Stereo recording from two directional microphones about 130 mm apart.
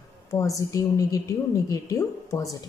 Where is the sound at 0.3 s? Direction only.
25° left (ahead or behind).